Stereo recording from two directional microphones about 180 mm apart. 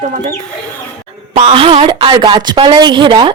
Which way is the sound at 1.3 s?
35° right (ahead or behind).